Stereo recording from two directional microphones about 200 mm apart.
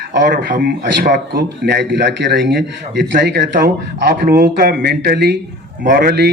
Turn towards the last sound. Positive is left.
turn(degrees=-50)  # may be behind; listen again after turning